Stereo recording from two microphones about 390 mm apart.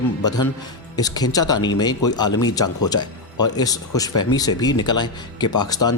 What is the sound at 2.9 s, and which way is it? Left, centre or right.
Speech, left.